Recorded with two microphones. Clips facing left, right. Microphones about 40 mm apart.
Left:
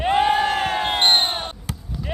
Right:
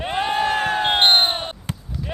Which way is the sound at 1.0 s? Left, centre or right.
Right.